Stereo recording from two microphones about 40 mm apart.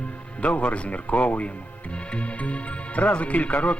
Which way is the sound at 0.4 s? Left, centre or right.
Left.